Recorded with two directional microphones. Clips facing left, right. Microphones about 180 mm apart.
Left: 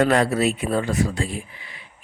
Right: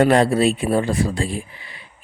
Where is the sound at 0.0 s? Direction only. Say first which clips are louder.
Right 4 dB; 30° right (ahead or behind).